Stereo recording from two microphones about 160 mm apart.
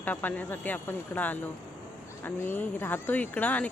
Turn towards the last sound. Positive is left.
turn(degrees=10)  # may be behind; listen again after turning